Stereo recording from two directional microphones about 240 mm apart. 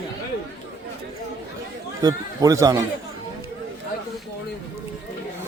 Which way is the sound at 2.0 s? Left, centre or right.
Centre.